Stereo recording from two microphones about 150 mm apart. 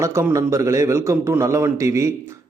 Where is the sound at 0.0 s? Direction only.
20° right (ahead or behind).